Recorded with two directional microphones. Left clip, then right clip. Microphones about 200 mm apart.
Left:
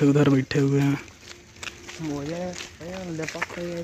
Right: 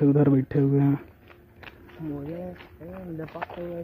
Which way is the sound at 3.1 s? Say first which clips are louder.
Left 4 dB; 50° left (ahead or behind).